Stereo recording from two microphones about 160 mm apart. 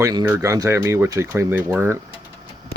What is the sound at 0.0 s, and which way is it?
Speech, 25° right (ahead or behind).